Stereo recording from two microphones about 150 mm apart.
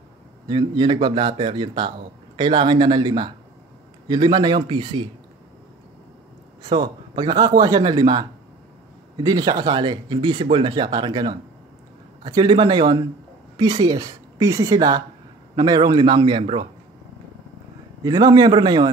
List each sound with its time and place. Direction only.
0.5 s speech: 35° right (ahead or behind)
6.6 s speech: 30° right (ahead or behind)
18.0 s speech: 25° right (ahead or behind)